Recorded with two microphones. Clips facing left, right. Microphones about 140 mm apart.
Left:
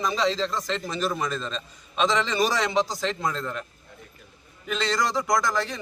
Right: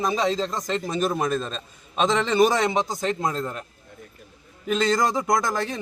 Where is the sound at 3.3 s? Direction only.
40° right (ahead or behind).